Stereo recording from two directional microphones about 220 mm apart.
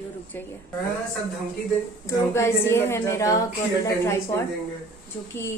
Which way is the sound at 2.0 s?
10° left (ahead or behind).